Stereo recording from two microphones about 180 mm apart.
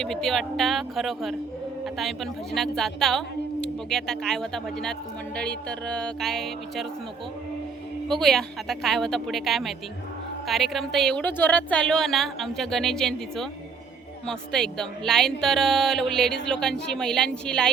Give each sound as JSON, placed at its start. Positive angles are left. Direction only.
{"t": 0.0, "sound": "a woman's voice", "side_deg": 0}
{"t": 8.0, "sound": "a woman's voice", "side_deg": 0}